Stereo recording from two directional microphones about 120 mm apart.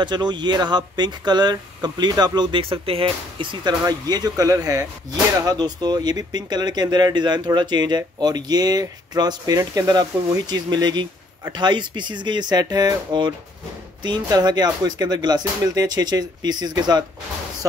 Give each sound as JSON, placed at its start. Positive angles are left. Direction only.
{"t": 0.0, "sound": "speech", "side_deg": -40}